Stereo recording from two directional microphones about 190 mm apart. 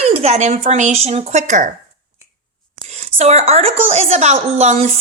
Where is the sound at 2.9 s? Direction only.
35° right (ahead or behind).